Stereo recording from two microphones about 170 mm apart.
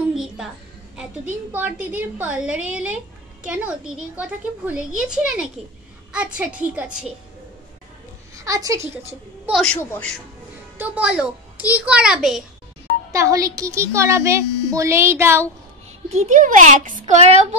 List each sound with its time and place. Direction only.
0.1 s music: 5° right (ahead or behind)
0.9 s a child's voice: 10° right (ahead or behind)
8.4 s a woman's voice: 20° right (ahead or behind)
9.5 s a child's voice: centre (ahead or behind)
9.8 s speech: 15° left (ahead or behind)
10.8 s a child's voice: 5° right (ahead or behind)
13.1 s speech: 20° right (ahead or behind)
16.1 s a child's voice: 45° right (ahead or behind)